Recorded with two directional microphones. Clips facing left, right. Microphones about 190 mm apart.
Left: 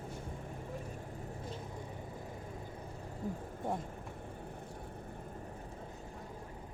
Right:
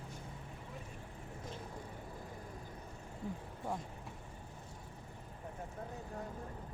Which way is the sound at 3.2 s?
40° left (ahead or behind).